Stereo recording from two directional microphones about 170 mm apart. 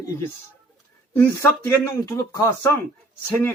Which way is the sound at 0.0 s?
20° left (ahead or behind).